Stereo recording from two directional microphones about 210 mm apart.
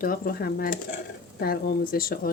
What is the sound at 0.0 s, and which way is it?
A woman's voice, 45° left (ahead or behind).